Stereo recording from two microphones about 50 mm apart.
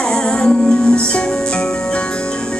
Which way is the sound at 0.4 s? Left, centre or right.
Centre.